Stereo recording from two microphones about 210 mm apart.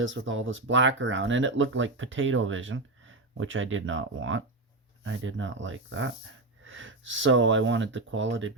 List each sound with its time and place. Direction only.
0.0 s speech: 65° right (ahead or behind)